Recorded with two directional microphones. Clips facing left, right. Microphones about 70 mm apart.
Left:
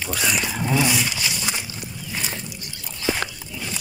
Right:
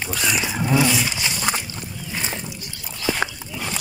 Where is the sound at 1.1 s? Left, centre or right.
Right.